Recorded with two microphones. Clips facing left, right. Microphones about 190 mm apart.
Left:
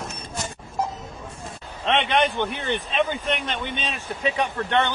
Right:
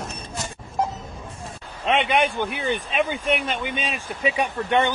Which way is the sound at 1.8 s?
10° right (ahead or behind).